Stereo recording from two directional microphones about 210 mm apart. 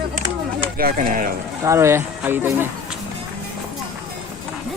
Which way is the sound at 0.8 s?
40° right (ahead or behind).